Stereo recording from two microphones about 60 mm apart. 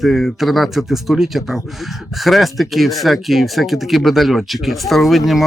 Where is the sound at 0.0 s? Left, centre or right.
Centre.